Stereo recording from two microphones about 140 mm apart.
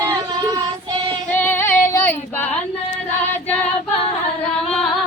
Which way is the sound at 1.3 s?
15° left (ahead or behind).